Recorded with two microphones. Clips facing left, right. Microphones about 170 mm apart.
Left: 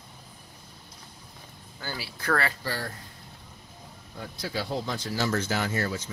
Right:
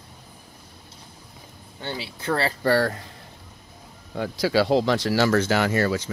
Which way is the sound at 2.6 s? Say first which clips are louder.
Right 13 dB; 70° right (ahead or behind).